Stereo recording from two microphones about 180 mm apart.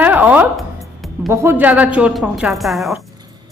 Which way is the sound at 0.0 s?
10° right (ahead or behind).